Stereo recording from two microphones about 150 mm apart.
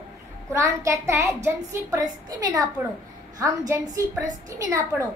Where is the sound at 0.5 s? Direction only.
20° right (ahead or behind).